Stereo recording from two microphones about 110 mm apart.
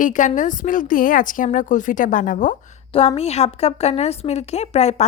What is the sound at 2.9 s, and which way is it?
A woman's voice, 60° left (ahead or behind).